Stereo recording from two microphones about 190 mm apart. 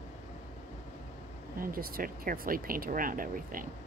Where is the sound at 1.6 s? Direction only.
50° right (ahead or behind).